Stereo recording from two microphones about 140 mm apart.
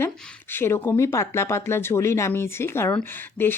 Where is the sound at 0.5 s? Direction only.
15° left (ahead or behind).